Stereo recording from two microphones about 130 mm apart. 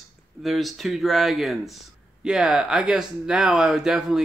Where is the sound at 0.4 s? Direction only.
Centre (ahead or behind).